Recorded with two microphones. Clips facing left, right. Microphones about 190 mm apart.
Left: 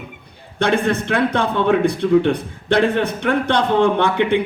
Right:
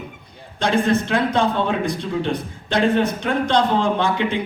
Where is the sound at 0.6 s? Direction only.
60° left (ahead or behind).